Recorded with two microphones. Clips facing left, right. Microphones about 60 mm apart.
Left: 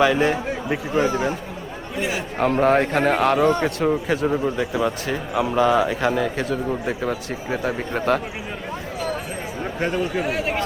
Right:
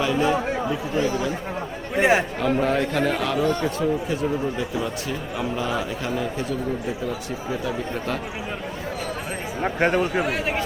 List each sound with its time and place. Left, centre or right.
0.0 s speech: left
2.0 s speech: right
2.4 s a man's voice: left
3.6 s speech: left
7.5 s a man's voice: left
9.6 s speech: right
10.2 s speech: centre